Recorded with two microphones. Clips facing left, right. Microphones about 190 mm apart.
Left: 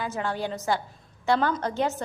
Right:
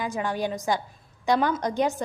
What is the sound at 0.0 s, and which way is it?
A woman's voice, 15° right (ahead or behind).